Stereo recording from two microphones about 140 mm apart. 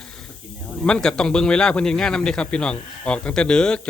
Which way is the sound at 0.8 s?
5° left (ahead or behind).